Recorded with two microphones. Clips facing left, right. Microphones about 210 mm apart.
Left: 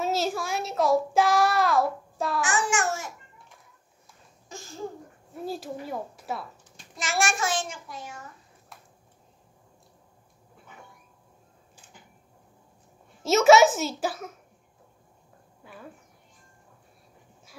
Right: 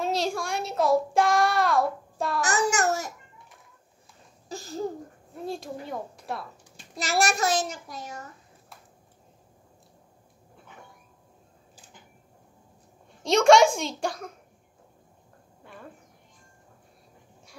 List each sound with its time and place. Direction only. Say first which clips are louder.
0.0 s child singing: even; 5° left (ahead or behind)
2.4 s child singing: right 4 dB; 40° right (ahead or behind)
4.5 s a child's voice: right 7 dB; 35° right (ahead or behind)
5.3 s a woman's voice: left 1 dB; 5° left (ahead or behind)
7.0 s a child's voice: right 2 dB; 35° right (ahead or behind)
13.2 s a woman's voice: even; 5° left (ahead or behind)
15.6 s a sound: even; 5° left (ahead or behind)